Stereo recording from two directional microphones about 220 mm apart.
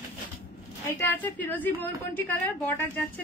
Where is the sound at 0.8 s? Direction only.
10° left (ahead or behind).